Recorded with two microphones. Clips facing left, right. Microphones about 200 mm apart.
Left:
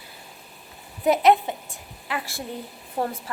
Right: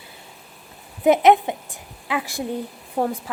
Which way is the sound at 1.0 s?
20° right (ahead or behind).